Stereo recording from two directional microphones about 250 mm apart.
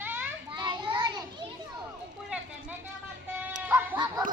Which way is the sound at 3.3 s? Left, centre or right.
Centre.